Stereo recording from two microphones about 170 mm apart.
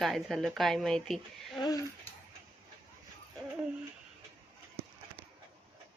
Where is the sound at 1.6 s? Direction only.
20° left (ahead or behind).